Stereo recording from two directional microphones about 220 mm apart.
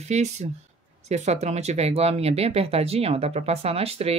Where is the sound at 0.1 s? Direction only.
30° right (ahead or behind).